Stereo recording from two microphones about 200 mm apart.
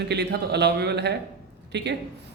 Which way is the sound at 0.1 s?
55° right (ahead or behind).